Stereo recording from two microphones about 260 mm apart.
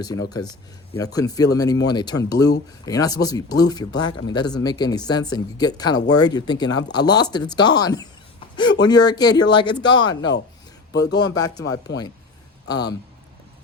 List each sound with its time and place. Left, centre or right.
0.0 s speech: centre